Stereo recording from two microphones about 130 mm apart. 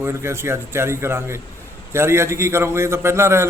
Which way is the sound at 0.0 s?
20° right (ahead or behind).